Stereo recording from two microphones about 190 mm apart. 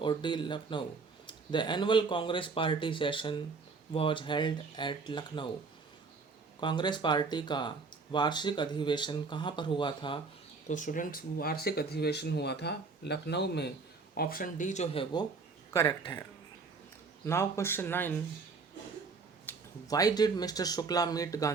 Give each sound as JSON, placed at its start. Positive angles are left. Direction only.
{"t": 0.0, "sound": "speech", "side_deg": 25}
{"t": 6.6, "sound": "speech", "side_deg": 25}
{"t": 10.7, "sound": "speech", "side_deg": 40}
{"t": 14.2, "sound": "speech", "side_deg": 50}
{"t": 15.7, "sound": "speech", "side_deg": 15}
{"t": 17.2, "sound": "speech", "side_deg": 15}
{"t": 19.5, "sound": "speech", "side_deg": 20}